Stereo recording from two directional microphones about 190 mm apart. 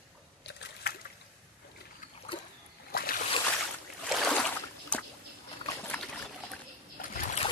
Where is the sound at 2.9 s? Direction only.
50° left (ahead or behind).